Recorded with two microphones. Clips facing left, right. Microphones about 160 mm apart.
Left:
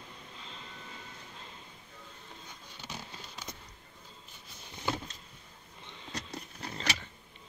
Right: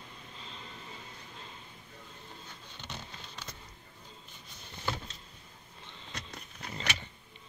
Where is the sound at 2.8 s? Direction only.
10° left (ahead or behind).